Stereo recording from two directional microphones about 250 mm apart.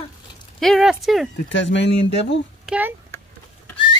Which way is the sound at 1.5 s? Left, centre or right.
Left.